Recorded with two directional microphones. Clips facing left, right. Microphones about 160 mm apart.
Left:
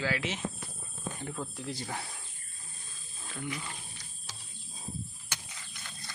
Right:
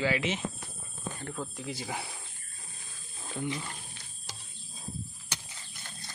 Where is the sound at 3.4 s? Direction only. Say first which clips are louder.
Right 4 dB; 25° right (ahead or behind).